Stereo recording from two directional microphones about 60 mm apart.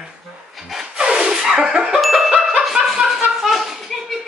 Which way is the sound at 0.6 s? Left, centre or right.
Centre.